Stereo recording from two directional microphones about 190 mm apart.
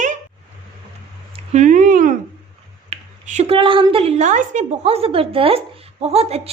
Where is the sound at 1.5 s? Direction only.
40° right (ahead or behind).